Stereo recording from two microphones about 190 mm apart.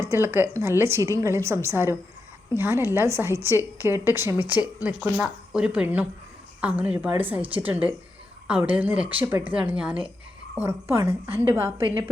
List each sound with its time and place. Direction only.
0.0 s a woman's voice: 15° right (ahead or behind)
9.0 s speech: 30° right (ahead or behind)
9.6 s a woman's voice: 5° right (ahead or behind)